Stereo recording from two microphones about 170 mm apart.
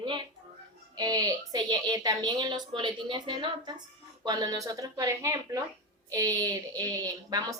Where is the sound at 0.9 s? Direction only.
20° right (ahead or behind).